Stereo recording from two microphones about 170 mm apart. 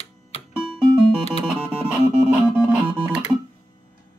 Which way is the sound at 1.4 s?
5° right (ahead or behind).